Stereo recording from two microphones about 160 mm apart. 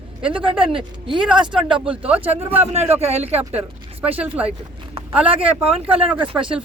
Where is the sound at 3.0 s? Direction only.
40° right (ahead or behind).